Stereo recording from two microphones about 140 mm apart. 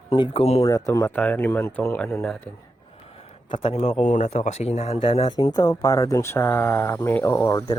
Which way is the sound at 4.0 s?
60° left (ahead or behind).